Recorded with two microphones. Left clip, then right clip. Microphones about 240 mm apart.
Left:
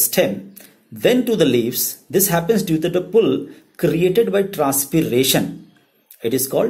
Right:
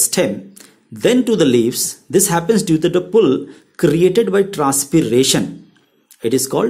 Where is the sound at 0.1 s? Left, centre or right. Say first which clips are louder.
Even; right.